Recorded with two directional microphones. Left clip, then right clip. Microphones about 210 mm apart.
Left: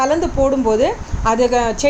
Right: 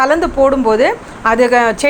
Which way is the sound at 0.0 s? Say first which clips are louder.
Right 5 dB; 5° right (ahead or behind).